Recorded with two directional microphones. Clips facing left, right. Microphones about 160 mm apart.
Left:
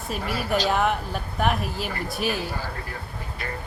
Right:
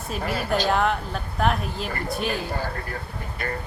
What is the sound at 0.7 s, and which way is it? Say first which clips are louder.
Speech: right 1 dB; 5° left (ahead or behind).